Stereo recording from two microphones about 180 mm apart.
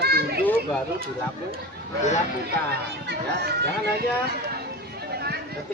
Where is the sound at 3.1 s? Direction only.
65° right (ahead or behind).